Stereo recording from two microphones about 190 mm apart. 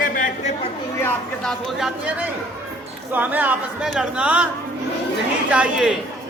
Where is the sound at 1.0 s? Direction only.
5° left (ahead or behind).